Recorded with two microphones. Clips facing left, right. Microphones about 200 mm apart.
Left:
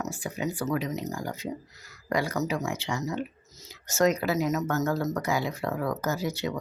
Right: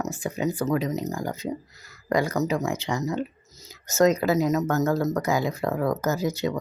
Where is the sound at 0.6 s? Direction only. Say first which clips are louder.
Right 3 dB; 40° right (ahead or behind).